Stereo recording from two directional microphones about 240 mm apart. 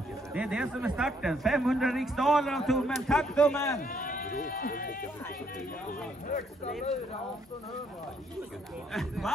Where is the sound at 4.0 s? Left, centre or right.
Left.